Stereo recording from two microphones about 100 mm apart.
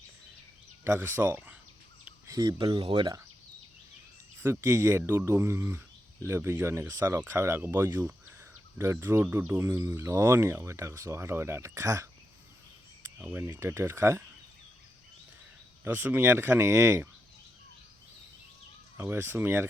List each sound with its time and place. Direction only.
0.9 s speech: 25° right (ahead or behind)
2.4 s speech: 45° right (ahead or behind)
4.6 s speech: 25° right (ahead or behind)
8.4 s a sound: 25° right (ahead or behind)
9.3 s speech: 20° right (ahead or behind)
13.1 s speech: 20° right (ahead or behind)
15.8 s speech: 20° right (ahead or behind)
18.9 s speech: 25° right (ahead or behind)